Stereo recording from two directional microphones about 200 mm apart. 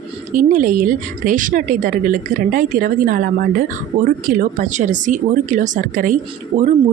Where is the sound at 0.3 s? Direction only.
45° right (ahead or behind).